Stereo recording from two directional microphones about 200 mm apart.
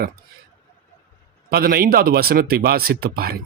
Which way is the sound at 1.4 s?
50° right (ahead or behind).